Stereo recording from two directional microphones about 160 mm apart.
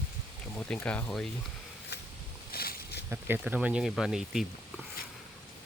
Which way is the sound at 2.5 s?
70° left (ahead or behind).